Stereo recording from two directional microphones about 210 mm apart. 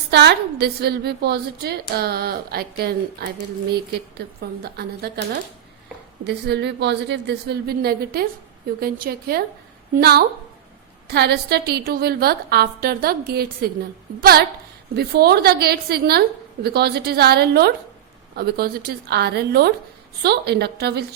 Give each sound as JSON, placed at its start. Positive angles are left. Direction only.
{"t": 0.1, "sound": "a woman's voice", "side_deg": -50}
{"t": 6.2, "sound": "a woman's voice", "side_deg": -55}